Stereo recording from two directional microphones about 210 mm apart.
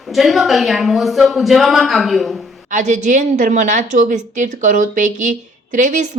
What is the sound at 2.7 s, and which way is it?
A woman's voice, 35° right (ahead or behind).